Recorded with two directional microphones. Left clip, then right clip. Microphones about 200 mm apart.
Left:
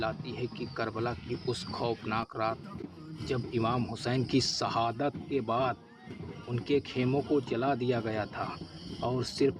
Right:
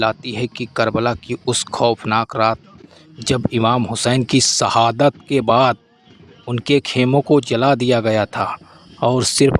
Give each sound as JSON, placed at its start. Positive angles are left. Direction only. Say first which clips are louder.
{"t": 0.0, "sound": "speech", "louder": "right 15 dB", "side_deg": -55}